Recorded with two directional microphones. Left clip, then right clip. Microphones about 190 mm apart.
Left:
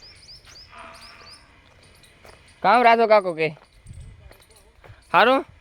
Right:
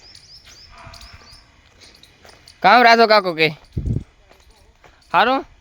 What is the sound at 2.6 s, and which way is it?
Speech, 35° right (ahead or behind).